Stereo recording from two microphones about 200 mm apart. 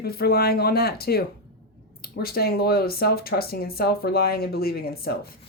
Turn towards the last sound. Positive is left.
turn(degrees=50)  # may be behind; listen again after turning